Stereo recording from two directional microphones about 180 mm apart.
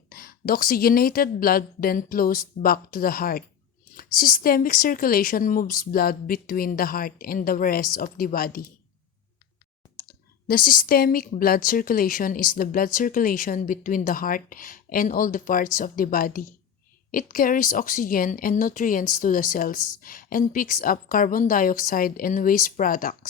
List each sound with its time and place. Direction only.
0.1 s a woman's voice: 55° left (ahead or behind)
10.1 s speech: 55° left (ahead or behind)